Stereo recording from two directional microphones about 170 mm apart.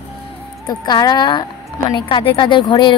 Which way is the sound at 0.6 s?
25° left (ahead or behind).